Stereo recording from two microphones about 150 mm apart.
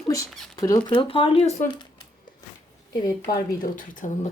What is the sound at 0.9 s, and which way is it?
Speech, 35° left (ahead or behind).